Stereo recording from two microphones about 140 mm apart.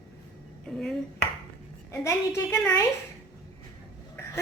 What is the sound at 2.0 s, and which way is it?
Speech, 20° left (ahead or behind).